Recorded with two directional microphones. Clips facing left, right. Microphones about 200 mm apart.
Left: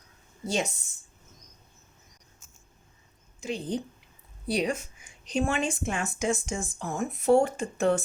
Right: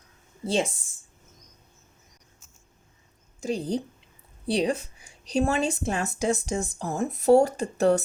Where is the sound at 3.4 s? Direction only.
40° right (ahead or behind).